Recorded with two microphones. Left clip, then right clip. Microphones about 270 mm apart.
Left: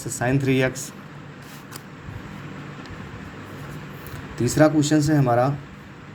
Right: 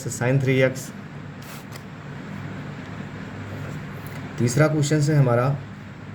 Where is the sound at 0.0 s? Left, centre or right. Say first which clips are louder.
Even; centre.